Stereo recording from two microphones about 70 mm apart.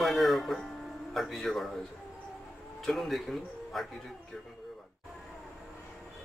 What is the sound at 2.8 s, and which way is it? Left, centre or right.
Speech, centre.